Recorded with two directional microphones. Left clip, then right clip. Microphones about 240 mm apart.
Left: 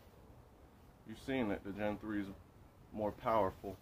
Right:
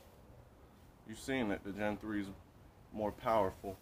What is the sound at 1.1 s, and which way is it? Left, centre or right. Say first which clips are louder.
Speech: right 1 dB; centre.